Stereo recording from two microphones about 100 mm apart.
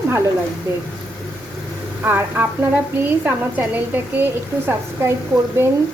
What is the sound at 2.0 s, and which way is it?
Speech, 20° right (ahead or behind).